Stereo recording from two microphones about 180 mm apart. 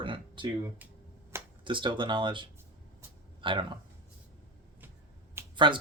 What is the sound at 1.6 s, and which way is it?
Speech, 25° right (ahead or behind).